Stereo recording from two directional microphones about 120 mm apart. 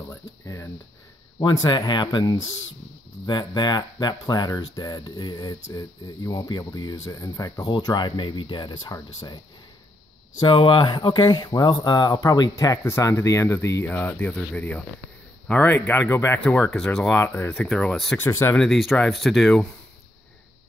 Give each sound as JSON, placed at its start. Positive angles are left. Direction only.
{"t": 1.4, "sound": "speech", "side_deg": 35}
{"t": 10.4, "sound": "speech", "side_deg": 45}
{"t": 16.7, "sound": "speech", "side_deg": 5}
{"t": 17.2, "sound": "speech", "side_deg": 20}
{"t": 17.6, "sound": "speech", "side_deg": 5}
{"t": 18.1, "sound": "speech", "side_deg": 20}
{"t": 18.6, "sound": "speech", "side_deg": 0}